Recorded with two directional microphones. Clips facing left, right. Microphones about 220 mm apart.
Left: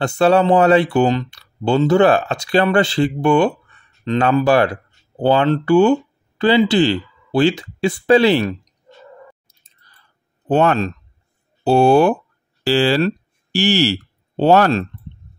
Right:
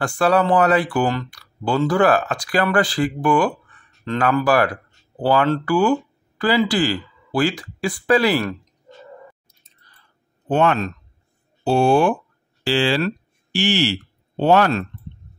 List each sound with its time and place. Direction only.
0.0 s speech: 25° left (ahead or behind)
10.5 s speech: 40° left (ahead or behind)